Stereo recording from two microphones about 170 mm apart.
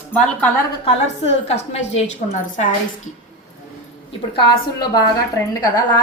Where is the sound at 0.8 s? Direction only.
40° left (ahead or behind).